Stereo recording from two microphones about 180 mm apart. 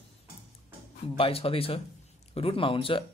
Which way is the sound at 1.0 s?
35° left (ahead or behind).